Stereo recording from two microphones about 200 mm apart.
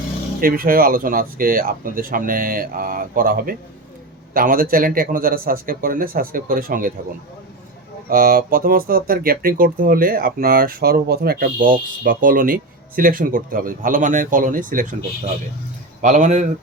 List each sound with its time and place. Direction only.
0.3 s speech: 45° right (ahead or behind)
8.1 s speech: 45° right (ahead or behind)
16.0 s speech: 40° right (ahead or behind)